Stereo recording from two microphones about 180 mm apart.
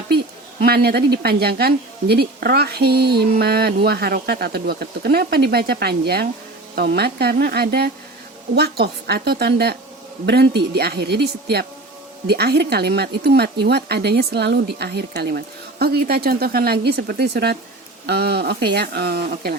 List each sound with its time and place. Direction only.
0.6 s a woman's voice: 60° right (ahead or behind)